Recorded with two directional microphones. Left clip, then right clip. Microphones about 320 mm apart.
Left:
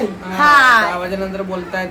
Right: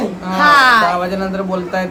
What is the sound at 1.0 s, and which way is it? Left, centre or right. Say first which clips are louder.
Speech: right 3 dB; centre.